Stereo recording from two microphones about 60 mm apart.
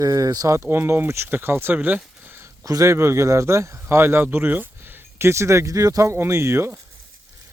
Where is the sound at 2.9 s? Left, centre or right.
Right.